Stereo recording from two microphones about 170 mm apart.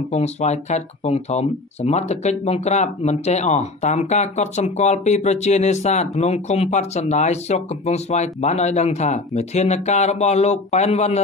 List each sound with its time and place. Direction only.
0.1 s speech: 40° left (ahead or behind)